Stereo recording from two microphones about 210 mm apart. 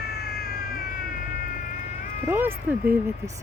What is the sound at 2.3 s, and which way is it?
Speech, 10° right (ahead or behind).